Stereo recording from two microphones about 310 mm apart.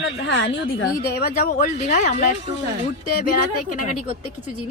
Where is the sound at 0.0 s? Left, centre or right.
Left.